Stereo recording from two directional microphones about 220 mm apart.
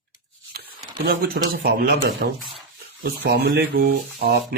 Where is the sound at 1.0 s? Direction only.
45° right (ahead or behind).